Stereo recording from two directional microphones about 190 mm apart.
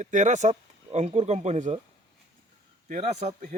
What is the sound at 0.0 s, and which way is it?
A man's voice, 40° right (ahead or behind).